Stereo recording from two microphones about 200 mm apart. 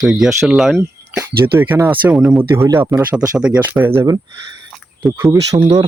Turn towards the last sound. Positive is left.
turn(degrees=-25)  # may be behind; listen again after turning